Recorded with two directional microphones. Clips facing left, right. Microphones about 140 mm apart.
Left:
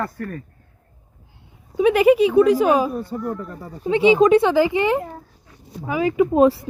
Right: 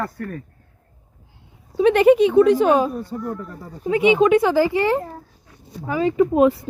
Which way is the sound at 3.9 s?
30° left (ahead or behind).